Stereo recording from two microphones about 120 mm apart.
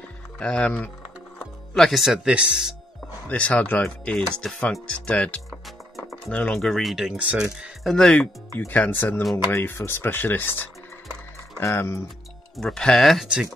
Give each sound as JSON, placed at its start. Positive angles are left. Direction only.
{"t": 0.4, "sound": "speech", "side_deg": 10}
{"t": 3.3, "sound": "speech", "side_deg": 10}
{"t": 5.9, "sound": "music", "side_deg": 0}
{"t": 6.3, "sound": "speech", "side_deg": 5}
{"t": 8.5, "sound": "speech", "side_deg": 15}
{"t": 12.5, "sound": "speech", "side_deg": 5}